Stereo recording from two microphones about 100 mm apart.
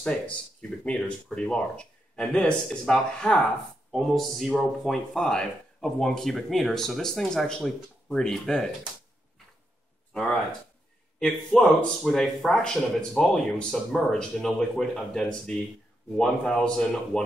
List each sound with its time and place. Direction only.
0.0 s speech: 10° left (ahead or behind)
11.1 s speech: 5° left (ahead or behind)